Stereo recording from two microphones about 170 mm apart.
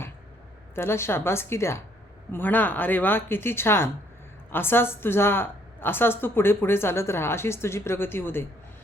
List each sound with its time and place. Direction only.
0.8 s a woman's voice: 15° left (ahead or behind)